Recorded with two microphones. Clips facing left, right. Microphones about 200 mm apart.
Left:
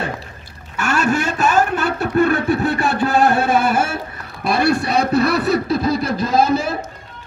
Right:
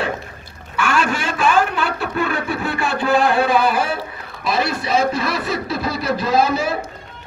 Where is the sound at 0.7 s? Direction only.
40° left (ahead or behind).